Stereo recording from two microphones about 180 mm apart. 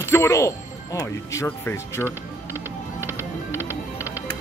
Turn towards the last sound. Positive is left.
turn(degrees=-10)  # may be behind; listen again after turning